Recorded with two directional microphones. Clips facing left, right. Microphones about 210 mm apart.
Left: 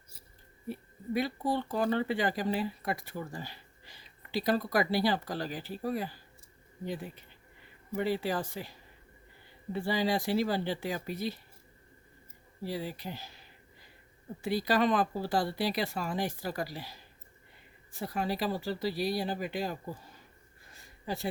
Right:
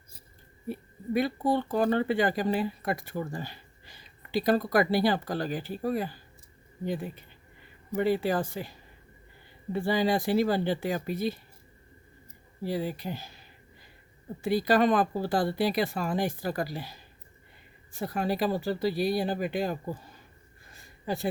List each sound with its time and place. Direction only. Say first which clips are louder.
1.1 s speech: right 4 dB; 50° right (ahead or behind)
7.9 s speech: right 5 dB; 50° right (ahead or behind)
9.7 s speech: right 4 dB; 50° right (ahead or behind)
12.6 s speech: right 5 dB; 50° right (ahead or behind)
14.4 s speech: right 4 dB; 50° right (ahead or behind)
18.0 s speech: right 4 dB; 50° right (ahead or behind)